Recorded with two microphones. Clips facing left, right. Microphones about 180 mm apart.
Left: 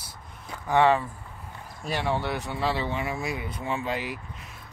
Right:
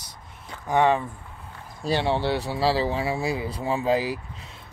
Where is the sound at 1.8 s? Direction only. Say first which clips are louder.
Right 4 dB; 30° right (ahead or behind).